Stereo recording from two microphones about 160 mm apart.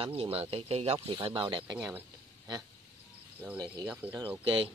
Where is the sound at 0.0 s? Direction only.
30° right (ahead or behind).